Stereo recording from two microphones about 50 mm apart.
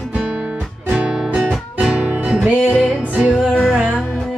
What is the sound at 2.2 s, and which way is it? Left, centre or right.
Music, right.